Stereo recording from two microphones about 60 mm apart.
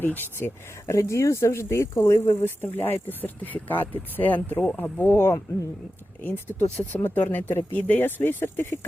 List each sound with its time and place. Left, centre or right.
0.0 s speech: left
0.9 s speech: left